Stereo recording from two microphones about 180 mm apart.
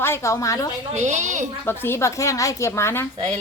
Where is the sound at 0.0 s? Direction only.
15° left (ahead or behind).